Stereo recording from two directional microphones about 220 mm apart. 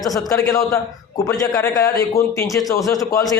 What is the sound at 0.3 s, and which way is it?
A man's voice, 15° left (ahead or behind).